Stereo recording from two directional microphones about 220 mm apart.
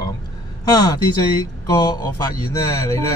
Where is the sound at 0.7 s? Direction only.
15° left (ahead or behind).